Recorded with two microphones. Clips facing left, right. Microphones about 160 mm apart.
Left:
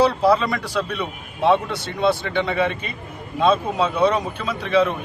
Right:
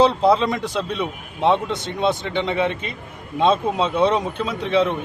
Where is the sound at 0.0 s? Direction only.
20° right (ahead or behind).